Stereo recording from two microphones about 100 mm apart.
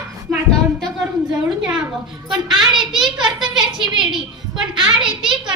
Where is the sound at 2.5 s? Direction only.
5° right (ahead or behind).